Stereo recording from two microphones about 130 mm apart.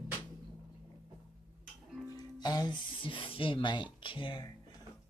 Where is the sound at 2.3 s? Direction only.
35° left (ahead or behind).